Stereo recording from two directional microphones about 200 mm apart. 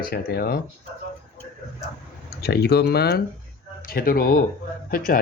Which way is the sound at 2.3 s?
55° left (ahead or behind).